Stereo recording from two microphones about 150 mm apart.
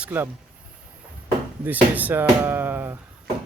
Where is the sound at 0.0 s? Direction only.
15° right (ahead or behind).